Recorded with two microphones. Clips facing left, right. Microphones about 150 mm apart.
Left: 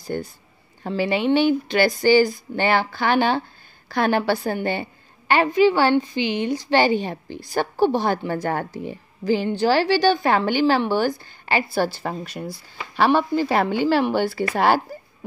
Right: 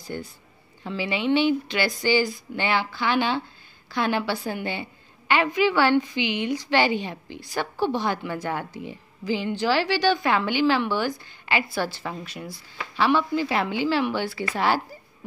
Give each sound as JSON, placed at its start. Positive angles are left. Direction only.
{"t": 0.1, "sound": "a woman's voice", "side_deg": 50}
{"t": 5.3, "sound": "a woman's voice", "side_deg": 35}